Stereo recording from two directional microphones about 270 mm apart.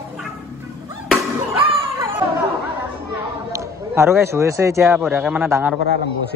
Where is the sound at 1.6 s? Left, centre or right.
Centre.